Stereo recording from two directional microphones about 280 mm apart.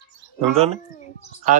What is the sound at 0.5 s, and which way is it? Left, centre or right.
Speech, right.